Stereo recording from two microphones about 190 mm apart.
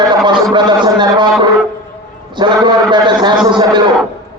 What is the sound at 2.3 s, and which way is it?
A man's voice, 25° right (ahead or behind).